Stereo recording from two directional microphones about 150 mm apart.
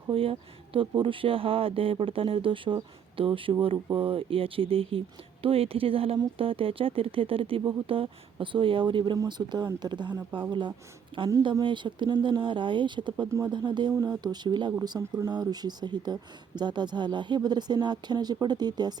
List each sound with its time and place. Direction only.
0.1 s speech: 35° right (ahead or behind)
13.2 s speech: 20° right (ahead or behind)
13.5 s speech: 30° right (ahead or behind)